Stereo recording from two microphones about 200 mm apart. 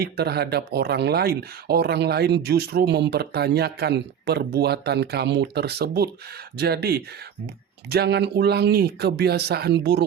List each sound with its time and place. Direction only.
0.0 s speech: 55° right (ahead or behind)